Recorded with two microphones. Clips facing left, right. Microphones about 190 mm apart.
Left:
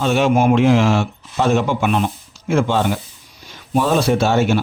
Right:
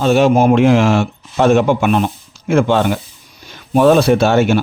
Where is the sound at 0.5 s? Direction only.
55° right (ahead or behind).